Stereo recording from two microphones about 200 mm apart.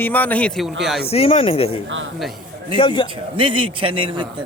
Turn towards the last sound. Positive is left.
turn(degrees=-25)  # may be behind; listen again after turning